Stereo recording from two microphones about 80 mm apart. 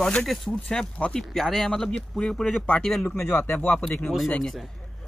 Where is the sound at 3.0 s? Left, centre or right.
Left.